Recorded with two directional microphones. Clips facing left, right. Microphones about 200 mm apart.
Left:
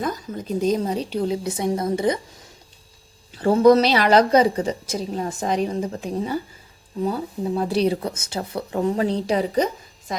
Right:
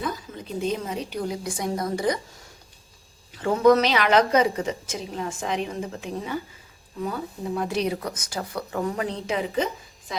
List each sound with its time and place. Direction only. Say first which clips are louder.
0.0 s a woman's voice: left 4 dB; 45° left (ahead or behind); by 2.1 s 25° left (ahead or behind)
3.3 s a woman's voice: left 4 dB; 35° left (ahead or behind)